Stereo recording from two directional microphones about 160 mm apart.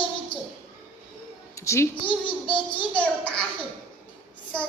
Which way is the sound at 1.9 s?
30° left (ahead or behind).